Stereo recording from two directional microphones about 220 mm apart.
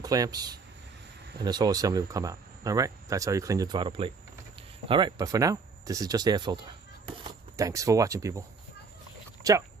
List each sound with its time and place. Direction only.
0.0 s speech: 15° right (ahead or behind)